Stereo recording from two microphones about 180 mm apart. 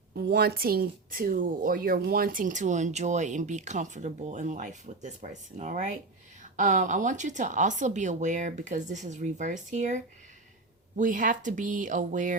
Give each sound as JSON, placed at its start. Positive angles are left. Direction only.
{"t": 0.1, "sound": "a woman's voice", "side_deg": -60}